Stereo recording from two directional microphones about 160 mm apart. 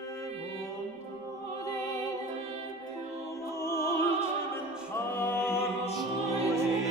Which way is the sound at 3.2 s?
15° left (ahead or behind).